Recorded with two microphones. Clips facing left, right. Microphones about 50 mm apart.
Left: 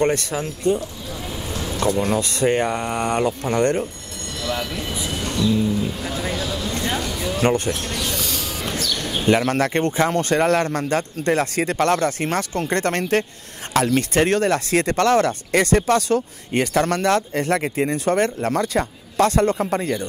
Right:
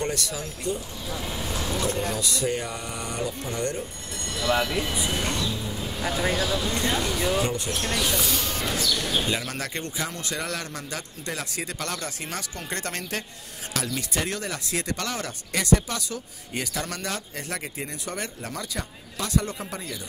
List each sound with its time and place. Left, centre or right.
0.0 s speech: left
1.1 s vehicle: centre
2.1 s speech: left
4.4 s speech: centre
5.7 s music: centre
5.9 s speech: centre
7.4 s speech: left
7.8 s speech: centre
8.7 s speech: left